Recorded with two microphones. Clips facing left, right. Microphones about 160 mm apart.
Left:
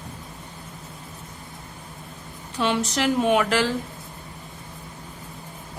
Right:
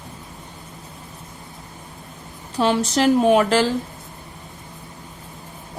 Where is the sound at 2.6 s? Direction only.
35° right (ahead or behind).